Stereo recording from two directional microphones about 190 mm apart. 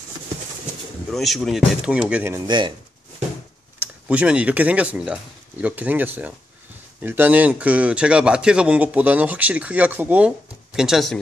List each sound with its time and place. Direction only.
1.1 s speech: centre (ahead or behind)
2.4 s speech: 25° right (ahead or behind)
3.8 s a man's voice: 5° right (ahead or behind)